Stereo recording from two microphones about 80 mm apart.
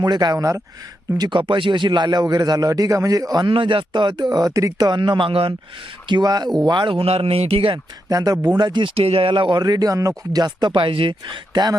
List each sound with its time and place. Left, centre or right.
0.0 s a man's voice: right
1.2 s a man's voice: right
3.4 s speech: right
4.9 s speech: right
6.1 s a man's voice: right
6.7 s speech: right
8.1 s speech: right
8.4 s speech: right
11.5 s a man's voice: right